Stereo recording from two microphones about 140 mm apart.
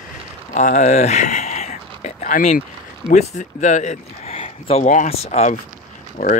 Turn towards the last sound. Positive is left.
turn(degrees=90)